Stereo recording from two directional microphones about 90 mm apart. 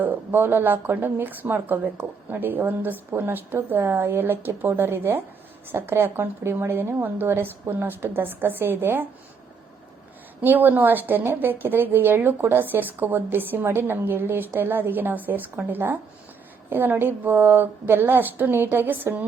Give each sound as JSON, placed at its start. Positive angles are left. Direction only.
{"t": 0.0, "sound": "a woman's voice", "side_deg": -20}
{"t": 10.4, "sound": "a woman's voice", "side_deg": -20}